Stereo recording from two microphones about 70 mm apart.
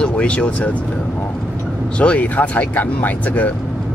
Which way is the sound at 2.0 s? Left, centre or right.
Centre.